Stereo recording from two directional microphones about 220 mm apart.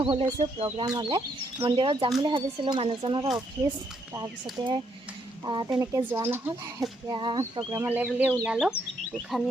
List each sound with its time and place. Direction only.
0.0 s speech: 25° right (ahead or behind)
4.6 s speech: 15° right (ahead or behind)
7.1 s speech: 20° right (ahead or behind); by 8.7 s centre (ahead or behind)